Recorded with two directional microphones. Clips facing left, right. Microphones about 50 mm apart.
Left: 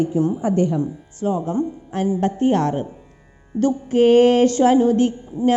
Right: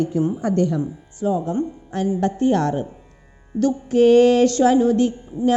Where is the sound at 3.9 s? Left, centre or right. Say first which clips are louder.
Even; right.